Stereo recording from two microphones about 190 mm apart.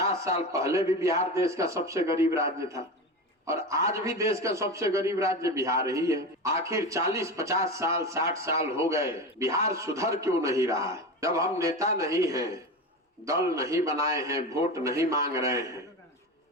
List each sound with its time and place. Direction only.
0.5 s a man's voice: 15° right (ahead or behind)